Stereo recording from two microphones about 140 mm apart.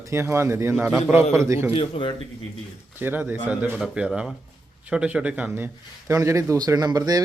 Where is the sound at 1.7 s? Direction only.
40° left (ahead or behind).